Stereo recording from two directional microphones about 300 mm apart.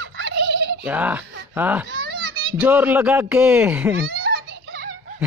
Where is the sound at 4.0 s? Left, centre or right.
Right.